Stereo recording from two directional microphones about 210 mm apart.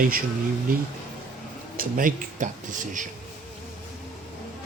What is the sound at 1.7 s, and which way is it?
Speech, 40° right (ahead or behind).